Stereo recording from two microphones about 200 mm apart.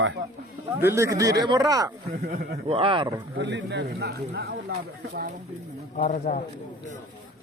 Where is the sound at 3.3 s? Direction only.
60° right (ahead or behind).